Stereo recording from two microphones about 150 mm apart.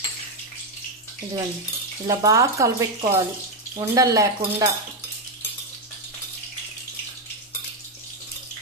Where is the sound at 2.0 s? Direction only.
20° right (ahead or behind).